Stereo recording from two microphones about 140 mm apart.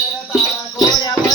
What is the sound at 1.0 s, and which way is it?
Music, 25° left (ahead or behind).